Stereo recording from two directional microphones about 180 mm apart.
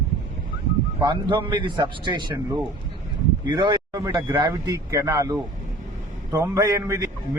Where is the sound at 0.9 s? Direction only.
25° right (ahead or behind).